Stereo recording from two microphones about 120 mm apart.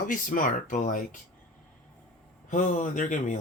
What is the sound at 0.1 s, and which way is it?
Mantra, 90° left.